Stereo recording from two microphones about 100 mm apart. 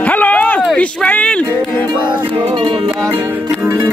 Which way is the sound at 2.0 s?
55° right (ahead or behind).